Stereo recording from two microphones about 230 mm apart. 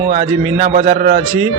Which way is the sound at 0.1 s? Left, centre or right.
Right.